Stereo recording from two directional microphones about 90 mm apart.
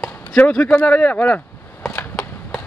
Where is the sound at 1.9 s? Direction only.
10° left (ahead or behind).